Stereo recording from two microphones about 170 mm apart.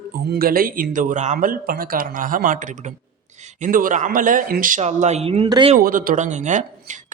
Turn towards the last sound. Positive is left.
turn(degrees=-45)  # may be behind; listen again after turning